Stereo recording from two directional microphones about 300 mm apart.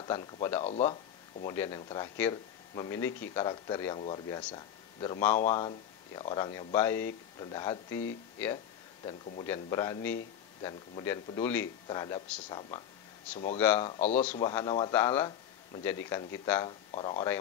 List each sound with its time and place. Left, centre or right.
0.0 s speech: centre
9.5 s speech: centre
13.8 s speech: left
16.9 s speech: centre